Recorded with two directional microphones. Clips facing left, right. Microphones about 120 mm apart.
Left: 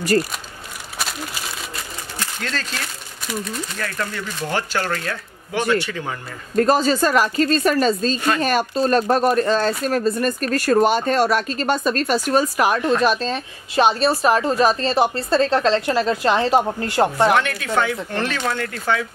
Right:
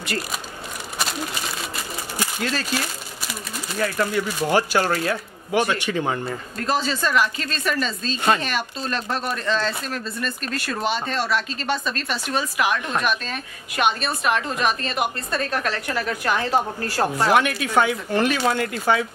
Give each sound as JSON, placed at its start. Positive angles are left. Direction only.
{"t": 2.1, "sound": "speech", "side_deg": -10}
{"t": 6.5, "sound": "speech", "side_deg": 45}
{"t": 17.3, "sound": "speech", "side_deg": -15}